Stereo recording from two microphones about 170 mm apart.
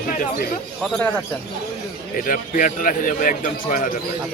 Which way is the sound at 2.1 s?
55° left (ahead or behind).